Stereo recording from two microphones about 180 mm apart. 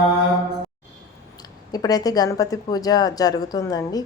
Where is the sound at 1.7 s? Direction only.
20° left (ahead or behind).